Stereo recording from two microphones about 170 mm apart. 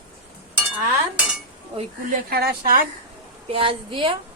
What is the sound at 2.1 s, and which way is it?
Speech, 60° right (ahead or behind).